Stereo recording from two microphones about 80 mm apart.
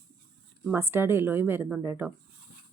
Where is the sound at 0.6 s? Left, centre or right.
Right.